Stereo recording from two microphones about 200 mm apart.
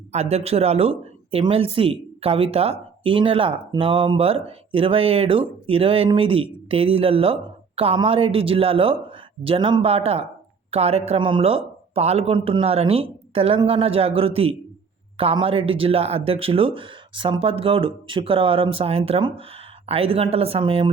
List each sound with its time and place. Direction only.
0.1 s speech: 30° right (ahead or behind)